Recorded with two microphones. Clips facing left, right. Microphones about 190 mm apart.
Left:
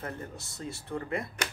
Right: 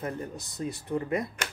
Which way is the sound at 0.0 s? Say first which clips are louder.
Right 5 dB; 15° right (ahead or behind).